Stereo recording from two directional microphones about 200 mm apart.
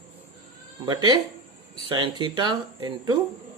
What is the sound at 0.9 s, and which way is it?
Speech, 20° right (ahead or behind).